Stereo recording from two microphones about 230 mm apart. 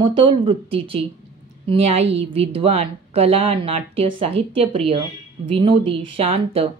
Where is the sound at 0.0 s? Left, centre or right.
Right.